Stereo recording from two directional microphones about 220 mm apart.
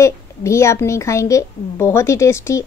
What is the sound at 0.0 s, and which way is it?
Speech, 15° left (ahead or behind).